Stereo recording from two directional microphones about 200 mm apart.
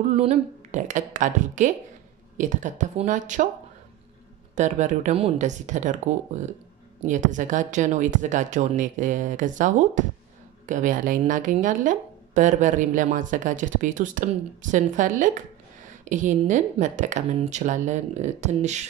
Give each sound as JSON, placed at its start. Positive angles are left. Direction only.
{"t": 0.1, "sound": "speech", "side_deg": -35}
{"t": 4.6, "sound": "speech", "side_deg": -35}